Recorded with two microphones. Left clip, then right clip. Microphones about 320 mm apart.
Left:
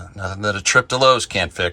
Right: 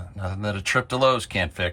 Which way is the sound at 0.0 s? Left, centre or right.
Centre.